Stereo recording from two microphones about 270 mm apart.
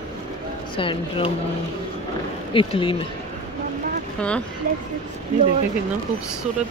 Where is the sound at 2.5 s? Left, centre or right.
Centre.